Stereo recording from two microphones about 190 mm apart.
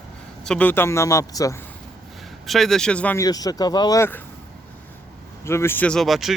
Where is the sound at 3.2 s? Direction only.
20° left (ahead or behind).